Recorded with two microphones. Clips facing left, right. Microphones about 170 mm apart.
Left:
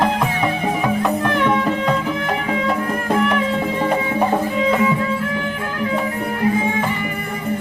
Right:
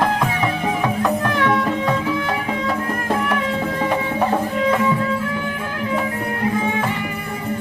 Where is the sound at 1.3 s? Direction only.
15° left (ahead or behind).